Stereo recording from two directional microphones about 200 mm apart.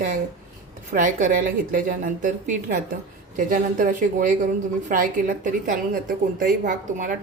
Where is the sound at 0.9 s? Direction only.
40° right (ahead or behind).